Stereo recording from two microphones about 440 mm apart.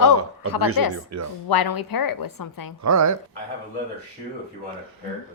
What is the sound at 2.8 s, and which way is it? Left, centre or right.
Speech, right.